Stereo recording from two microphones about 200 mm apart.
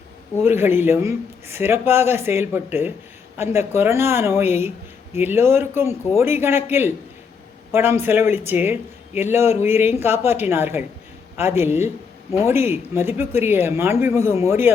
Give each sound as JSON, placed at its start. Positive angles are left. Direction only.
{"t": 0.4, "sound": "a man's voice", "side_deg": -10}